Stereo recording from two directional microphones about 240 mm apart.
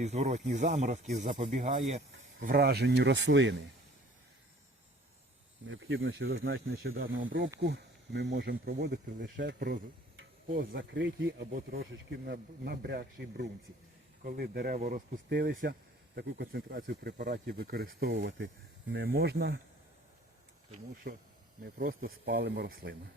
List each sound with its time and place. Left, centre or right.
0.0 s a man's voice: right
5.6 s speech: right
7.6 s a man's voice: right
21.1 s a man's voice: right